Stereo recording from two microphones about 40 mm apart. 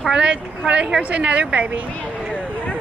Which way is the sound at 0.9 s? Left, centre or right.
Right.